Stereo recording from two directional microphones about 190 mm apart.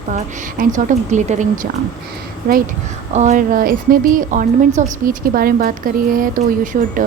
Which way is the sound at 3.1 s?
40° right (ahead or behind).